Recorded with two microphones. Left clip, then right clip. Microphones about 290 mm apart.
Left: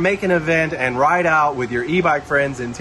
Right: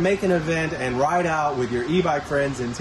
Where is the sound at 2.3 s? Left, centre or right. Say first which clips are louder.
Left 5 dB; centre.